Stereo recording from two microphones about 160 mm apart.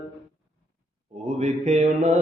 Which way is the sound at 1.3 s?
45° right (ahead or behind).